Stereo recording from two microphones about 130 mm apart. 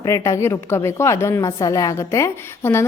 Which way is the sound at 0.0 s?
25° left (ahead or behind).